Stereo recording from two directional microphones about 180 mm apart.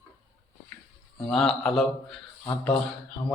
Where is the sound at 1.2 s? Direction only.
5° left (ahead or behind).